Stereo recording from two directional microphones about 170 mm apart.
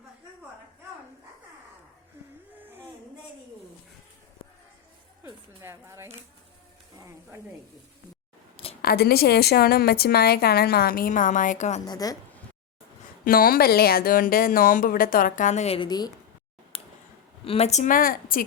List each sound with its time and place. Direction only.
5.2 s a sound: 15° right (ahead or behind)
8.8 s a woman's voice: 65° left (ahead or behind); by 11.8 s 45° left (ahead or behind)
11.9 s a woman's voice: 20° left (ahead or behind)
13.2 s a woman's voice: 60° left (ahead or behind); by 15.9 s 35° left (ahead or behind)
15.9 s a woman's voice: 25° left (ahead or behind)
16.7 s a sound: 35° left (ahead or behind)
17.4 s a woman's voice: 35° left (ahead or behind); by 18.4 s 60° left (ahead or behind)